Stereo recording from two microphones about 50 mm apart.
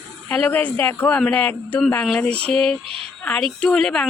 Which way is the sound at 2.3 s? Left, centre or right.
Centre.